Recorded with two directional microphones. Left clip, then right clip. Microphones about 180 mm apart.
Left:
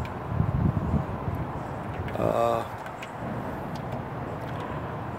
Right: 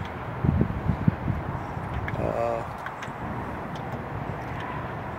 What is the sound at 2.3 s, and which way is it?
Vehicle, 15° left (ahead or behind).